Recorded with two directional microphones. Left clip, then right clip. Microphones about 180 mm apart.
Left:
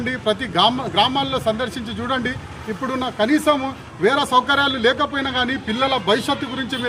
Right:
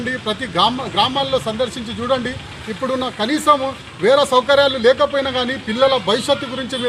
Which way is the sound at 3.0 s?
25° left (ahead or behind).